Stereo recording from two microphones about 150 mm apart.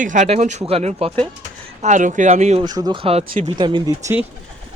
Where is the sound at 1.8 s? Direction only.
55° right (ahead or behind).